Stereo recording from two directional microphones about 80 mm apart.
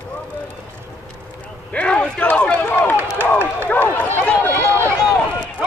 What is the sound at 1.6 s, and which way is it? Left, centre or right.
Run, centre.